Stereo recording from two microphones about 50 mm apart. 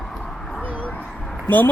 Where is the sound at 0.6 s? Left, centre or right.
Right.